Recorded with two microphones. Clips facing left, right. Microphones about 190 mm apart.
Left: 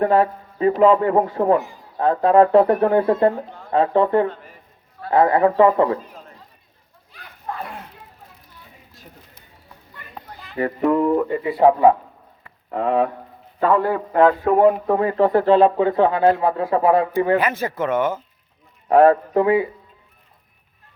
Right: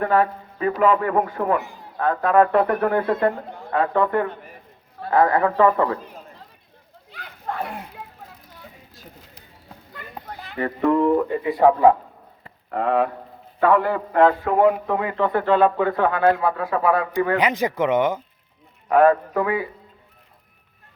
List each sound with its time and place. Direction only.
0.0 s a man's voice: 30° left (ahead or behind)
7.1 s a sound: 70° right (ahead or behind)
8.0 s children playing: 90° right
9.3 s a sound: 75° right (ahead or behind)
10.6 s a man's voice: 20° left (ahead or behind)
13.6 s a man's voice: 25° left (ahead or behind)
17.3 s speech: 15° right (ahead or behind)
18.9 s speech: 30° left (ahead or behind)